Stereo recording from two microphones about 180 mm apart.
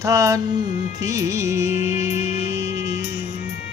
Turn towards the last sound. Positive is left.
turn(degrees=-15)  # may be behind; listen again after turning